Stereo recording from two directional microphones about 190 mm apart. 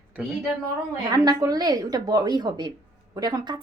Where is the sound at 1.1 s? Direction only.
20° right (ahead or behind).